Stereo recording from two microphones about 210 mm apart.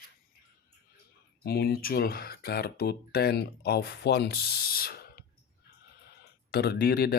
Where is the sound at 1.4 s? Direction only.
50° left (ahead or behind).